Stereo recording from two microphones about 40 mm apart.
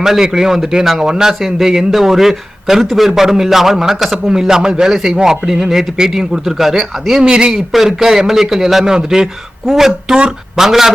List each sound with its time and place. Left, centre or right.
0.0 s a man's voice: centre
7.2 s a man's voice: right
7.5 s a man's voice: centre